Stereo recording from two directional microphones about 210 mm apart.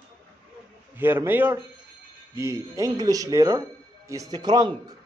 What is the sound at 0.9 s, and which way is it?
Speech, 10° right (ahead or behind).